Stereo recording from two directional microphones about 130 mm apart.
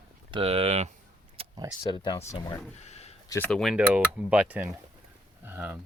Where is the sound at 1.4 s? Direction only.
50° right (ahead or behind).